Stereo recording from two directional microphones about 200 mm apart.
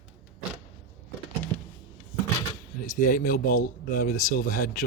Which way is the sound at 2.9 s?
40° left (ahead or behind).